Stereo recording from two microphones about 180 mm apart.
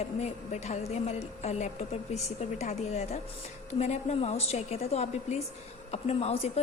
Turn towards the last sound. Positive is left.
turn(degrees=35)  # may be behind; listen again after turning